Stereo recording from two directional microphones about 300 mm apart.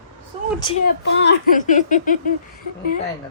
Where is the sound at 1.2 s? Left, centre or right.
Left.